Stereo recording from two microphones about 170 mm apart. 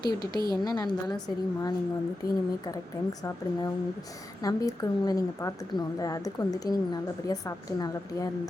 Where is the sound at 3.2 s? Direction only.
20° left (ahead or behind).